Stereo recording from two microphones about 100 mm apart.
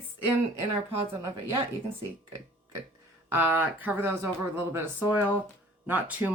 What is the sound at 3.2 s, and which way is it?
Speech, 20° right (ahead or behind).